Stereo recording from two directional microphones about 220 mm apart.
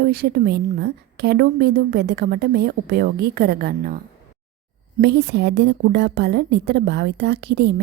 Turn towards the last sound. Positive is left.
turn(degrees=-50)  # may be behind; listen again after turning